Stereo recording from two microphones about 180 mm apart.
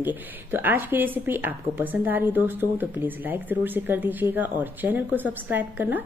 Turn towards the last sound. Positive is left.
turn(degrees=-10)  # may be behind; listen again after turning